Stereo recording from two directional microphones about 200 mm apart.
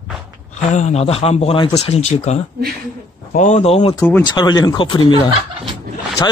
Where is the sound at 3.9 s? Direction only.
10° left (ahead or behind).